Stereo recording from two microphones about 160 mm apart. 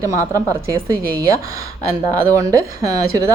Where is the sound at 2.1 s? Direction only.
10° left (ahead or behind).